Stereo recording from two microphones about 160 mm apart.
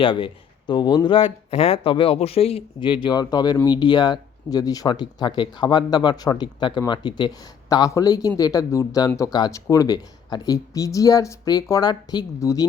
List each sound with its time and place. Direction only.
0.0 s speech: 30° left (ahead or behind)